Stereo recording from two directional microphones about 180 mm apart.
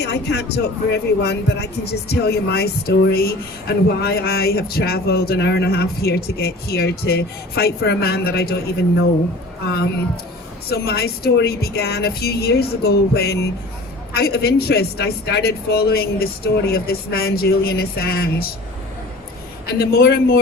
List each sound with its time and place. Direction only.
0.0 s speech: 70° left (ahead or behind)
10.7 s speech: 65° left (ahead or behind)
19.8 s speech: 60° left (ahead or behind)